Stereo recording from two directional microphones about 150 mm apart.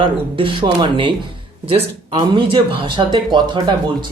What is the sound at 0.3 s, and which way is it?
Speech, 35° right (ahead or behind).